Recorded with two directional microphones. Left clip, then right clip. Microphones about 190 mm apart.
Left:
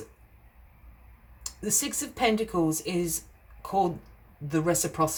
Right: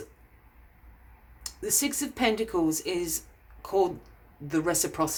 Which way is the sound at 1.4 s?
30° right (ahead or behind).